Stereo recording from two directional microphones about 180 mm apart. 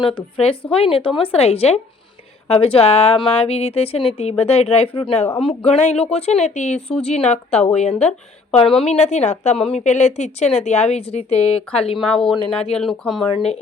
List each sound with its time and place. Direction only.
0.0 s a woman's voice: 30° left (ahead or behind)
11.9 s a woman's voice: centre (ahead or behind)